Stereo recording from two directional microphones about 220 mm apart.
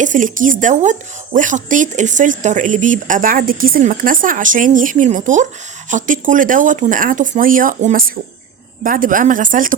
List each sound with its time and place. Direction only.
0.0 s speech: 35° right (ahead or behind)